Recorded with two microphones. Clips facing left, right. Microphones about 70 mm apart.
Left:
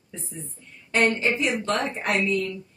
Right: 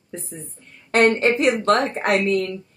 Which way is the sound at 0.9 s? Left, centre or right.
Right.